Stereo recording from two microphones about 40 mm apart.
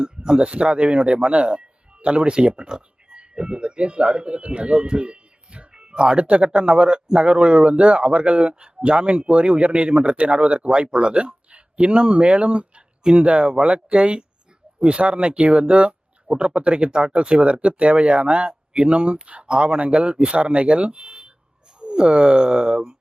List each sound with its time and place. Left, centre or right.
0.0 s speech: centre